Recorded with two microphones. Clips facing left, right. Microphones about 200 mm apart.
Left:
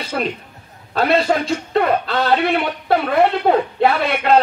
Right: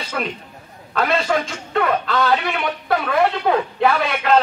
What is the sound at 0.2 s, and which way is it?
A man's voice, 35° left (ahead or behind).